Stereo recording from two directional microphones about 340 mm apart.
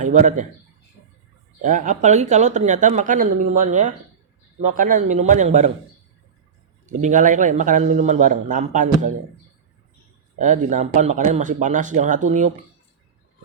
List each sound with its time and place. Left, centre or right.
0.0 s speech: right
1.6 s a man's voice: right
6.8 s a man's voice: right
10.3 s a man's voice: right